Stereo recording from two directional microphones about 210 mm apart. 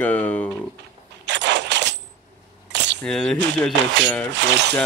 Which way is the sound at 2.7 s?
55° right (ahead or behind).